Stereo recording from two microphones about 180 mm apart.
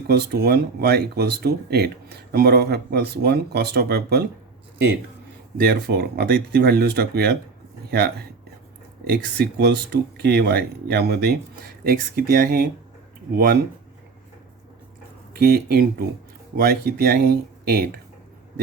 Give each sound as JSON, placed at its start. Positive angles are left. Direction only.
{"t": 0.1, "sound": "speech", "side_deg": -60}
{"t": 5.5, "sound": "speech", "side_deg": -60}
{"t": 15.3, "sound": "speech", "side_deg": -60}